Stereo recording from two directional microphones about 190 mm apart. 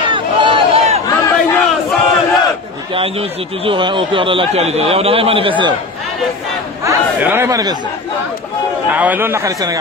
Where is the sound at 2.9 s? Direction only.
30° right (ahead or behind).